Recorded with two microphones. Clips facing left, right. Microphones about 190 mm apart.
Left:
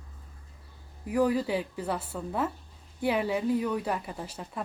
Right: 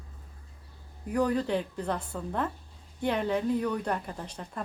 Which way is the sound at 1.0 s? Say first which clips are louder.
Left 1 dB; 5° left (ahead or behind).